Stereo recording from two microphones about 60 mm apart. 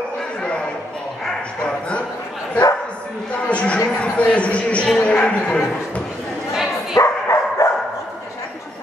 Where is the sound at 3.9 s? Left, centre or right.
Left.